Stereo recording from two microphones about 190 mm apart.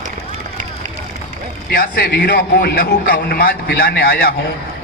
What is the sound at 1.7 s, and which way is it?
A man's voice, 60° left (ahead or behind).